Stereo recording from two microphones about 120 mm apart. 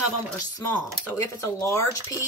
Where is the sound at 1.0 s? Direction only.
20° left (ahead or behind).